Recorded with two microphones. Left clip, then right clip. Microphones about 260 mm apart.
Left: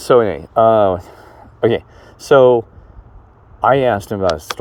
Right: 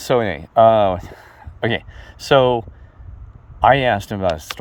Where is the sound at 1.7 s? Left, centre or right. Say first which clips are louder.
Left 6 dB; right.